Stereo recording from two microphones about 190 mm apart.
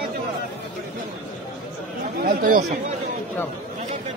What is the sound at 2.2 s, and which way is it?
Speech, 50° right (ahead or behind).